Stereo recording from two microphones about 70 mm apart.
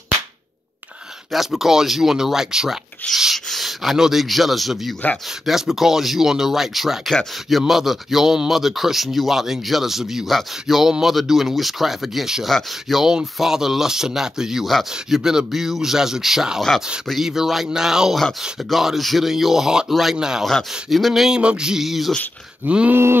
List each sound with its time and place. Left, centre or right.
1.3 s speech: centre
3.0 s rub: centre
3.3 s speech: centre
17.6 s music: centre
18.4 s speech: centre
20.4 s speech: centre
21.4 s music: centre
22.7 s music: centre